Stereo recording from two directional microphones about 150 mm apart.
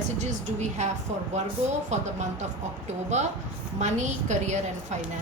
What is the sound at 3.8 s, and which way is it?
A woman's voice, 50° right (ahead or behind).